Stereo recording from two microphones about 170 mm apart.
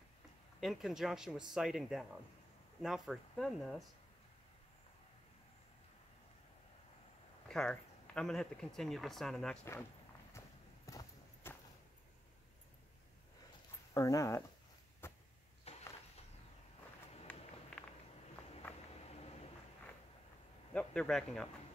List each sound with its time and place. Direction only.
0.6 s speech: centre (ahead or behind)
7.4 s speech: 5° left (ahead or behind)
10.9 s clip-clop: 20° left (ahead or behind)
13.9 s speech: 20° left (ahead or behind)
15.0 s a sound: 15° left (ahead or behind)
17.3 s a sound: 5° left (ahead or behind)
17.7 s walk: 5° left (ahead or behind)
18.9 s a sound: 40° left (ahead or behind)
20.7 s a man's voice: 5° left (ahead or behind)